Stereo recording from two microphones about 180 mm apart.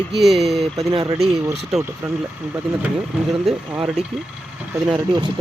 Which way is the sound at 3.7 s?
5° right (ahead or behind).